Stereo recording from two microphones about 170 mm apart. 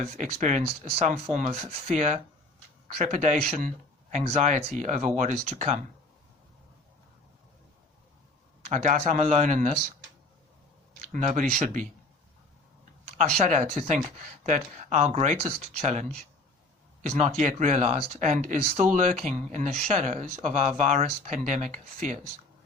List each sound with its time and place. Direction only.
0.0 s speech: 40° right (ahead or behind)
8.7 s speech: 45° right (ahead or behind)
11.1 s speech: 50° right (ahead or behind)
13.4 s speech: 45° right (ahead or behind)